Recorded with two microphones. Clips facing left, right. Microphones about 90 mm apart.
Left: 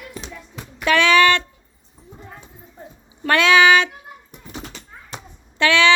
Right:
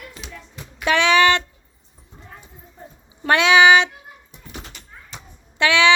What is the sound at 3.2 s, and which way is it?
Speech, 20° right (ahead or behind).